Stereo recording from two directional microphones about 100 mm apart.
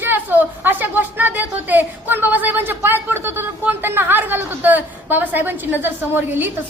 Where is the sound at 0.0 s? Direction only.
20° right (ahead or behind).